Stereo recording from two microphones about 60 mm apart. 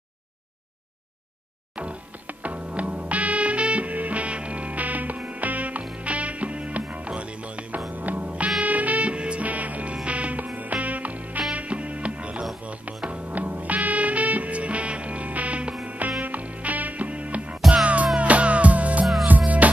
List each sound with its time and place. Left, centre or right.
1.8 s music: right
17.6 s music: centre
18.2 s music: right